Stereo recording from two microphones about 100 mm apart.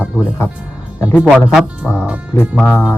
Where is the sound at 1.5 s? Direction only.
5° right (ahead or behind).